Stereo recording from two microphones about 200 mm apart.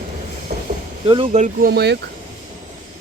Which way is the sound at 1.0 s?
30° right (ahead or behind).